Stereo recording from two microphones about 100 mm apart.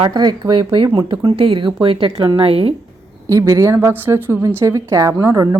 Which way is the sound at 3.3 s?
35° right (ahead or behind).